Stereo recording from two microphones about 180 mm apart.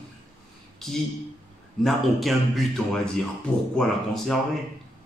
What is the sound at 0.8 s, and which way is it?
Speech, centre (ahead or behind).